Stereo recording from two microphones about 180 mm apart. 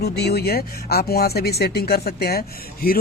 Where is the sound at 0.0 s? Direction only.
65° left (ahead or behind).